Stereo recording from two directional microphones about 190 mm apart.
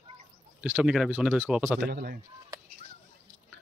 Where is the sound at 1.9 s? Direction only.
50° right (ahead or behind).